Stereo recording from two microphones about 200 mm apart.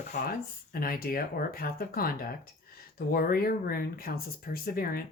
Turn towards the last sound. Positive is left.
turn(degrees=45)  # may be behind; listen again after turning